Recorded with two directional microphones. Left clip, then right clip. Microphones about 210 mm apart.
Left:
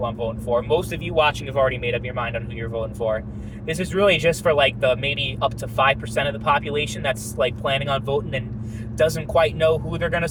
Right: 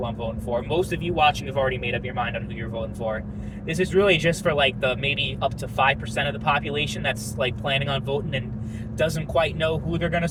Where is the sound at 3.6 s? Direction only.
30° left (ahead or behind).